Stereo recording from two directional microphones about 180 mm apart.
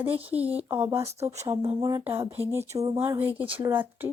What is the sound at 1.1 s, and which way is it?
Speech, 35° right (ahead or behind).